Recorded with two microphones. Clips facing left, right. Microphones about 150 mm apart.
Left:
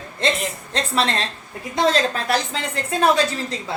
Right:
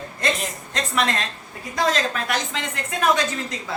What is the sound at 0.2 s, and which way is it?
A woman's voice, 25° left (ahead or behind).